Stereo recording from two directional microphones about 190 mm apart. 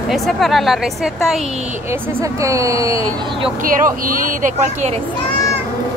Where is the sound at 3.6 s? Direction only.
45° right (ahead or behind).